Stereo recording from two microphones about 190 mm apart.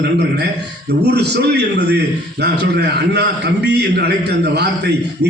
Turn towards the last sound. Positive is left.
turn(degrees=-60)  # may be behind; listen again after turning